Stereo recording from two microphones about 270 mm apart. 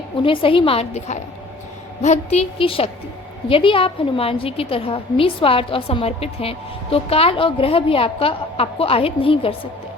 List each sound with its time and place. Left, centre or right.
0.2 s a woman's voice: centre